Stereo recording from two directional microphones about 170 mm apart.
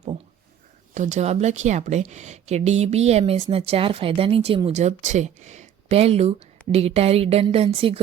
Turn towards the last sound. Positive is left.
turn(degrees=-35)  # may be behind; listen again after turning